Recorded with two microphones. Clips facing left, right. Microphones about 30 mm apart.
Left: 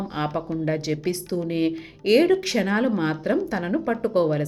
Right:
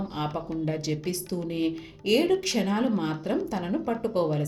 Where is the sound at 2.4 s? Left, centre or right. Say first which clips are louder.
Left 4 dB; centre.